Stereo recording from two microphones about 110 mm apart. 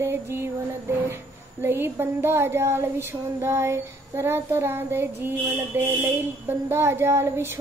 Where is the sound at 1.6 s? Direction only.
20° right (ahead or behind).